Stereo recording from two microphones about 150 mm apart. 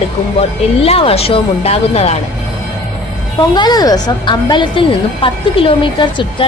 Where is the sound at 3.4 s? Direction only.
30° left (ahead or behind).